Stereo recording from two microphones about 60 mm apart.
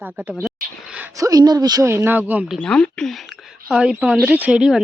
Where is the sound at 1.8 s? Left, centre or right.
Right.